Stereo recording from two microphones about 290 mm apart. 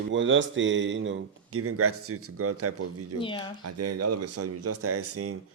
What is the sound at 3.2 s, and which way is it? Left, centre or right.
Speech, centre.